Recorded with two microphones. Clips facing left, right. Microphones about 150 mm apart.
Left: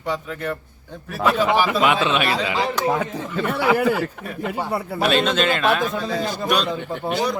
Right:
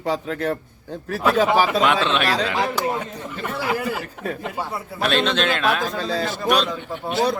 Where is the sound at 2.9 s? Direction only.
80° left; by 3.9 s 65° left (ahead or behind).